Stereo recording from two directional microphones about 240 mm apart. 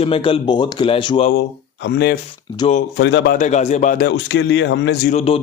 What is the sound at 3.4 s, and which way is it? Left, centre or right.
Speech, left.